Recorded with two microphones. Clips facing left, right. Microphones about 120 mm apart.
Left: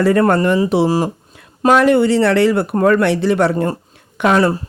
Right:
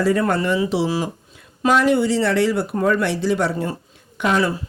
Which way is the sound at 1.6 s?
60° left (ahead or behind).